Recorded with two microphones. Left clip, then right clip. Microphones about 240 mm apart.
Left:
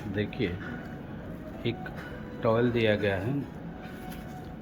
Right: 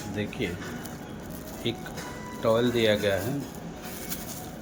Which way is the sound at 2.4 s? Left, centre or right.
Centre.